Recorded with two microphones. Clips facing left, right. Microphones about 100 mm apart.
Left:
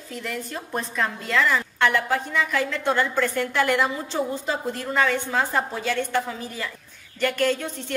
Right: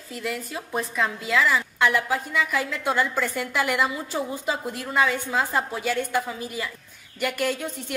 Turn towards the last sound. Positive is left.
turn(degrees=-10)  # may be behind; listen again after turning